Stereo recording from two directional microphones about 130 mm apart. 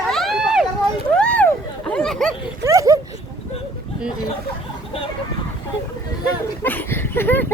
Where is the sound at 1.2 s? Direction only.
10° left (ahead or behind).